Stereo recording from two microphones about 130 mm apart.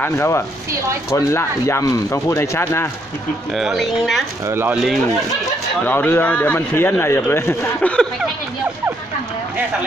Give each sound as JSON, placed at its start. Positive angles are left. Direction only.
{"t": 0.0, "sound": "speech", "side_deg": 20}
{"t": 3.5, "sound": "speech", "side_deg": 0}
{"t": 4.5, "sound": "speech", "side_deg": -15}
{"t": 4.7, "sound": "speech", "side_deg": 0}
{"t": 5.9, "sound": "a man's voice", "side_deg": 15}